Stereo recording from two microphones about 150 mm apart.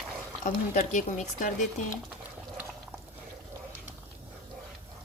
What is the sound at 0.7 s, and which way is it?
Speech, 65° left (ahead or behind).